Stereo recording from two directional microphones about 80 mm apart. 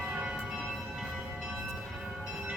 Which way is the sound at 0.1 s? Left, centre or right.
Centre.